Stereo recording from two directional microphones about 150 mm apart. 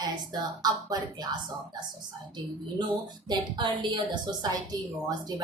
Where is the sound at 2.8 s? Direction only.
30° right (ahead or behind).